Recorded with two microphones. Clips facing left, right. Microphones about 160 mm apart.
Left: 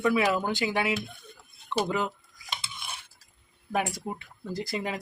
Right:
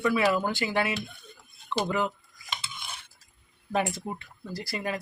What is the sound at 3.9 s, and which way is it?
Speech, 15° left (ahead or behind).